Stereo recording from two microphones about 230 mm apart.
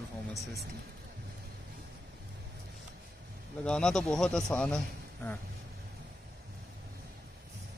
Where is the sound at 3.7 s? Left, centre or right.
Centre.